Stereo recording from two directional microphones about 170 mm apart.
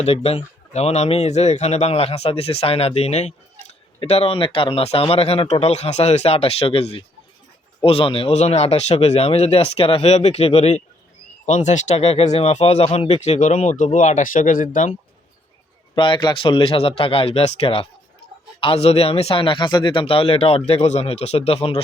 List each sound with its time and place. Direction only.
0.0 s speech: 35° left (ahead or behind)
16.0 s speech: 30° left (ahead or behind)